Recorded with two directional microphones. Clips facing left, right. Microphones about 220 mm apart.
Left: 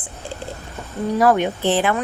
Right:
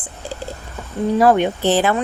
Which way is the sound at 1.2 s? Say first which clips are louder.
Right 2 dB; 30° right (ahead or behind).